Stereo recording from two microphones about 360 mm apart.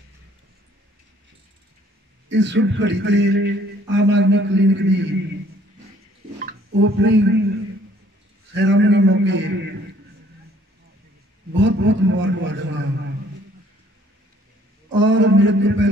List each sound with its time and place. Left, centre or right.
2.2 s a man's voice: right
6.4 s speech: right
8.5 s a man's voice: right
11.5 s a man's voice: right
14.9 s a man's voice: right